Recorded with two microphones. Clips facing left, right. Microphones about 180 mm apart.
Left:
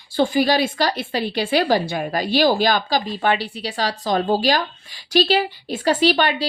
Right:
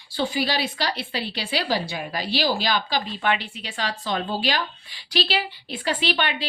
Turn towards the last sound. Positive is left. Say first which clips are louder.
# left 8 dB
turn(degrees=40)  # may be behind; listen again after turning